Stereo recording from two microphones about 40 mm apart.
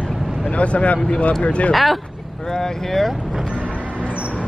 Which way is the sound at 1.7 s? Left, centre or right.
Centre.